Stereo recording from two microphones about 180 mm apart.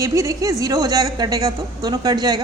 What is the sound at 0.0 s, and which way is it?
A woman's voice, 15° right (ahead or behind).